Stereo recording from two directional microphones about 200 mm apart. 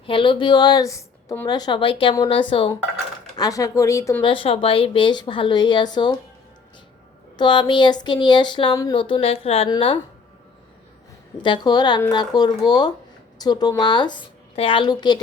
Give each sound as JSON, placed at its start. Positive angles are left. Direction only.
{"t": 0.0, "sound": "speech", "side_deg": 25}
{"t": 7.3, "sound": "speech", "side_deg": 25}
{"t": 11.4, "sound": "speech", "side_deg": 20}